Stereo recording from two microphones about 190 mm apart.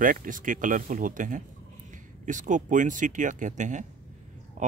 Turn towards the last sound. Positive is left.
turn(degrees=-40)  # may be behind; listen again after turning